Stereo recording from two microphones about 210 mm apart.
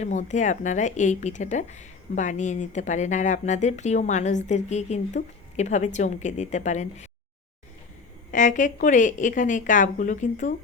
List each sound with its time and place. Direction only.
0.0 s a woman's voice: 35° left (ahead or behind)
8.3 s a woman's voice: 35° left (ahead or behind)